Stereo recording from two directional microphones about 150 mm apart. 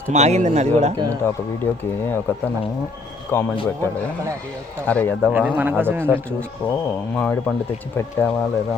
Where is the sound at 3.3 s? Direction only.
15° left (ahead or behind).